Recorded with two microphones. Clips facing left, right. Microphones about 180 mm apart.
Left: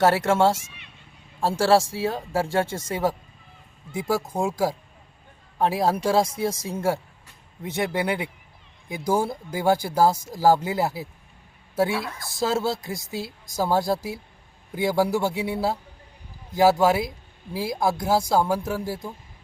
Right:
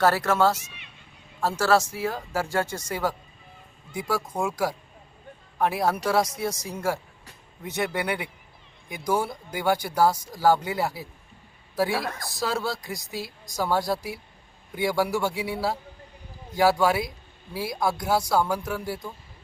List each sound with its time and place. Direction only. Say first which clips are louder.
0.0 s speech: left 2 dB; 25° left (ahead or behind)
9.8 s speech: left 2 dB; 25° left (ahead or behind)